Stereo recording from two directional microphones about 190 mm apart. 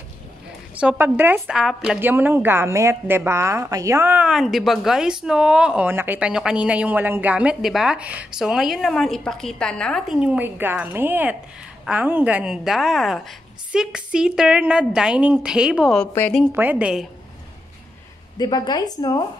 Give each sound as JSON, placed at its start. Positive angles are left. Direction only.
{"t": 0.7, "sound": "a woman's voice", "side_deg": -10}
{"t": 16.5, "sound": "a woman's voice", "side_deg": -10}
{"t": 18.4, "sound": "a woman's voice", "side_deg": 20}